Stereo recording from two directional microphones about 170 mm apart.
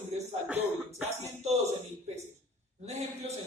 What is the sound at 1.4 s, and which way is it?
A man's voice, 40° right (ahead or behind).